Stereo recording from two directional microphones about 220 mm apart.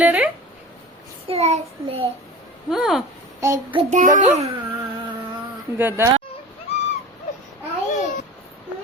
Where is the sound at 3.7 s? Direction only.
35° right (ahead or behind).